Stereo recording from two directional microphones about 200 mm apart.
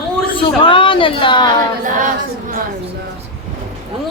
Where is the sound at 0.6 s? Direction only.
25° left (ahead or behind).